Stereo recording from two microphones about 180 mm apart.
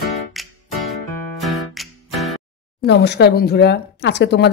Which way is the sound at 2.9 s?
70° left (ahead or behind).